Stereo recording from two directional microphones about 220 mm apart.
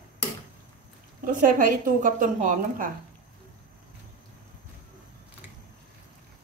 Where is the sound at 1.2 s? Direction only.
35° right (ahead or behind).